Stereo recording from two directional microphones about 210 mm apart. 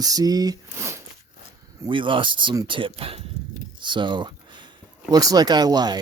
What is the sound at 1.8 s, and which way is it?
Speech, 25° right (ahead or behind).